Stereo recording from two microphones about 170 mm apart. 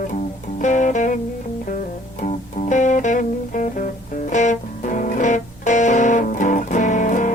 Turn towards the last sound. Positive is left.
turn(degrees=50)  # may be behind; listen again after turning